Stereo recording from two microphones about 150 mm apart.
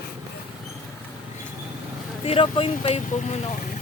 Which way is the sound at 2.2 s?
40° left (ahead or behind).